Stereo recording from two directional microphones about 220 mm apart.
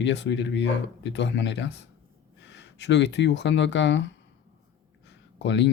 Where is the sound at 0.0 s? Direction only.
55° left (ahead or behind).